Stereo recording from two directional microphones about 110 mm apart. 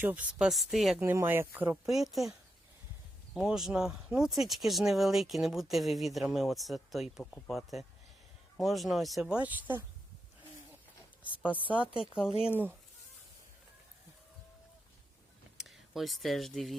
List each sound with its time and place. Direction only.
0.0 s speech: 15° right (ahead or behind)
0.9 s speech: 20° right (ahead or behind)
1.7 s speech: centre (ahead or behind)
3.3 s speech: 5° right (ahead or behind)
9.4 s speech: 15° right (ahead or behind)
11.6 s speech: 50° left (ahead or behind)
15.5 s speech: centre (ahead or behind)